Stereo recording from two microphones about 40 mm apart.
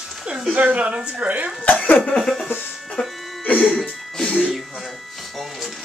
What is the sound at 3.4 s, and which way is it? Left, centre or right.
Music, left.